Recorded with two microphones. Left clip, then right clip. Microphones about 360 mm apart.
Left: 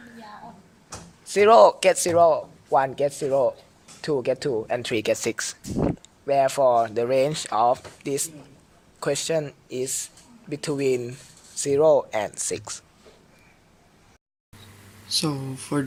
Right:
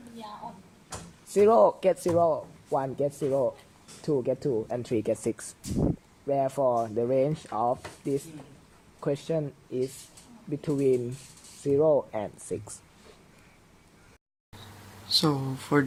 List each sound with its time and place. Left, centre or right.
1.5 s speech: left
5.7 s speech: left
6.2 s speech: left
15.2 s speech: centre